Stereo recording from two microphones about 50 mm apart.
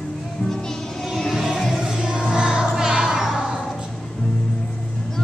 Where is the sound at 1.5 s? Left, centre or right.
Centre.